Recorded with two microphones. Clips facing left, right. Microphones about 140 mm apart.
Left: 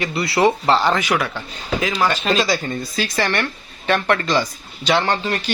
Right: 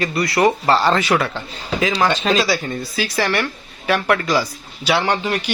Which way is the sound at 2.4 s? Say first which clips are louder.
Even; 5° right (ahead or behind).